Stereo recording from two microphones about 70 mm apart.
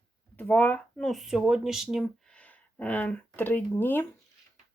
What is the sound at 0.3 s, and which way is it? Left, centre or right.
Speech, left.